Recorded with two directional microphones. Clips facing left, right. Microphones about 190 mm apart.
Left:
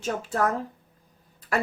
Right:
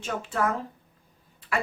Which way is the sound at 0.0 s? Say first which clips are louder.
Left 2 dB; 40° left (ahead or behind).